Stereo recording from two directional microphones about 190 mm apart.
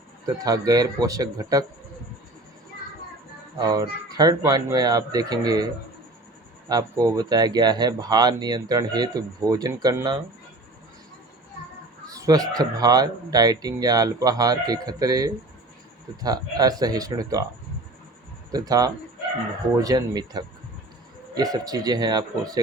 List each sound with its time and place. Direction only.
0.3 s speech: 20° right (ahead or behind)
3.6 s speech: 20° right (ahead or behind)
6.7 s speech: 20° right (ahead or behind)
12.1 s speech: 20° right (ahead or behind)
18.5 s speech: 20° right (ahead or behind)